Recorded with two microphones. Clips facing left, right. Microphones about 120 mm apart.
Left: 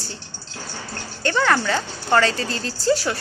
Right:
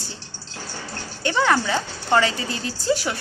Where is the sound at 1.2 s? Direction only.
15° right (ahead or behind).